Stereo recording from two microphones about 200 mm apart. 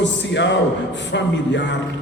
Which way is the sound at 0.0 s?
60° left (ahead or behind).